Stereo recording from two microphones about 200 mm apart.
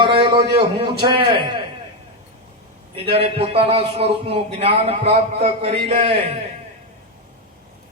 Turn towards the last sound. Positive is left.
turn(degrees=-30)  # may be behind; listen again after turning